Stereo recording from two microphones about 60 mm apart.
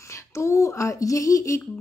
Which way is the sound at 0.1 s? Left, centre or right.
Left.